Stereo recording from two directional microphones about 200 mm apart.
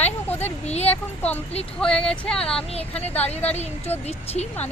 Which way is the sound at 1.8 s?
5° left (ahead or behind).